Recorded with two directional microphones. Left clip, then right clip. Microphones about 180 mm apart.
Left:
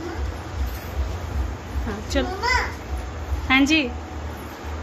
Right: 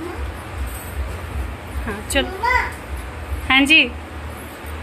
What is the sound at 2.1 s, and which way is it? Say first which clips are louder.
Speech: right 4 dB; 5° left (ahead or behind).